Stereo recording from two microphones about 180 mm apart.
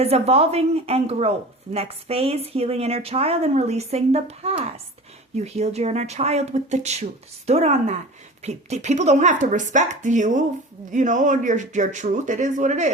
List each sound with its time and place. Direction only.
0.0 s speech: 35° right (ahead or behind)